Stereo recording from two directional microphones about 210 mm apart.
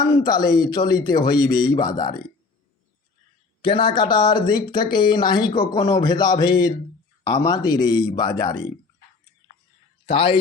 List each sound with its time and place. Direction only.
0.0 s speech: 20° left (ahead or behind)
3.6 s speech: 25° left (ahead or behind)
10.1 s speech: 25° left (ahead or behind)